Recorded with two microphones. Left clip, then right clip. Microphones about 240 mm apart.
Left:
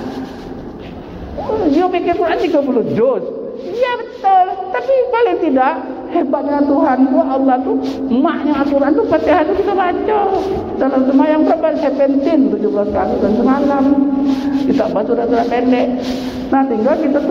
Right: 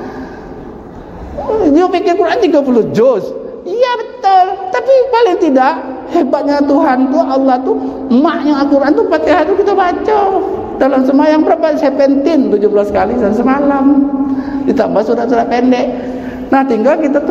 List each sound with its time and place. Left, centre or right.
1.8 s a man's voice: right
14.8 s a man's voice: right